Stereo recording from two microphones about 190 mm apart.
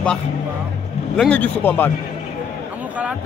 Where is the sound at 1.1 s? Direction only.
5° left (ahead or behind).